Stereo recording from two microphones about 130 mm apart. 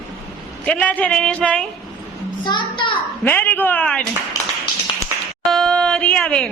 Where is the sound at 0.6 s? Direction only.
10° left (ahead or behind).